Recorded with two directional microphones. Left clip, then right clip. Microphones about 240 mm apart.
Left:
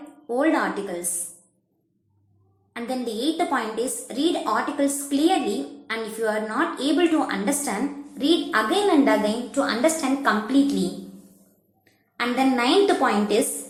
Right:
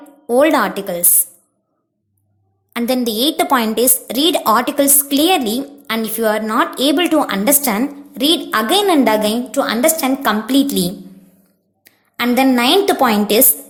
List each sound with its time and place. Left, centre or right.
0.3 s a woman's voice: right
2.7 s a woman's voice: right
12.1 s a woman's voice: right